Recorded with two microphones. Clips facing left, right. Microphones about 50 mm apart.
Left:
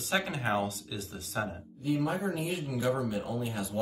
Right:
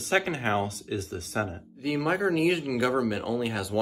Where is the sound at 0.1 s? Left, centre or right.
Right.